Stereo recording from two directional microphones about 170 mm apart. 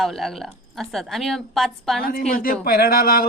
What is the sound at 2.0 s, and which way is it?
Speech, 60° left (ahead or behind).